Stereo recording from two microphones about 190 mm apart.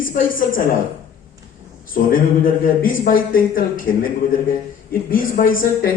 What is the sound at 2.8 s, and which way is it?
A woman's voice, 45° left (ahead or behind).